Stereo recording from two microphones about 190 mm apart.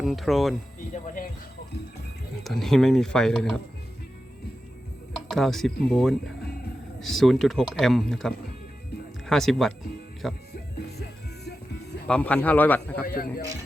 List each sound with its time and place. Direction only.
0.0 s speech: centre (ahead or behind)
1.0 s music: 45° left (ahead or behind)
2.4 s speech: centre (ahead or behind)
5.3 s speech: centre (ahead or behind)
12.0 s a man's voice: 5° left (ahead or behind)
13.1 s speech: 50° left (ahead or behind)